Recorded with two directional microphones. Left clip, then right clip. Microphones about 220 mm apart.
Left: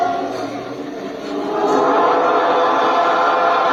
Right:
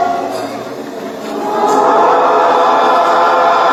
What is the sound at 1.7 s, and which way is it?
Choir, 35° right (ahead or behind).